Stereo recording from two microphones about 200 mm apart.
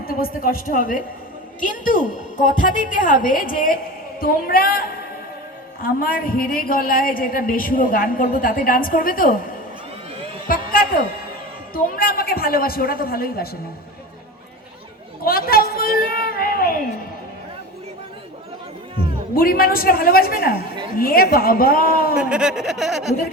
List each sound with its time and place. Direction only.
0.0 s a man's voice: 50° left (ahead or behind)
10.5 s a woman's voice: 45° left (ahead or behind)
15.2 s a sound: 50° left (ahead or behind)
18.9 s a man's voice: 45° left (ahead or behind)
22.2 s speech: 5° right (ahead or behind)